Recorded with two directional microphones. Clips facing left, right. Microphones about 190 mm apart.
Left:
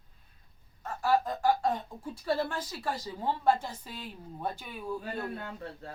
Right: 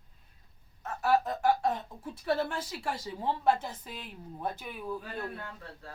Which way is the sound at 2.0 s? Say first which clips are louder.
Even; 5° left (ahead or behind).